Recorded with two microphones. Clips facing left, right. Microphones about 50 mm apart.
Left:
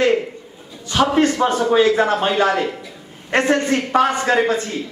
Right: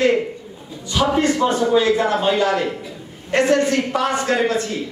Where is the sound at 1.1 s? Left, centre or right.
Left.